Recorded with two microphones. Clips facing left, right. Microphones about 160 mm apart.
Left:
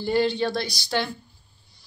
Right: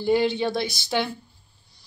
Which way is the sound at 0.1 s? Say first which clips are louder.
Right 1 dB; 15° right (ahead or behind).